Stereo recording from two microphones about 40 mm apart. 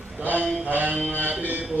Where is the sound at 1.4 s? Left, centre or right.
Right.